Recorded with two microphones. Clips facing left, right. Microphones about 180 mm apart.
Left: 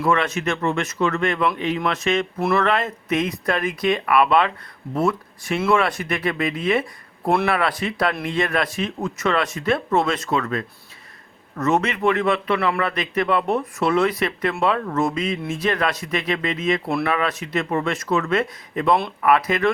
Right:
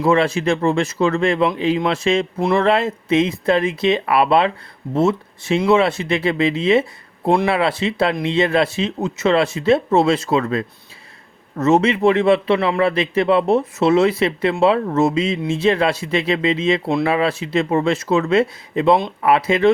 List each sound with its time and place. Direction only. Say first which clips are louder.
0.0 s speech: right 5 dB; 30° right (ahead or behind)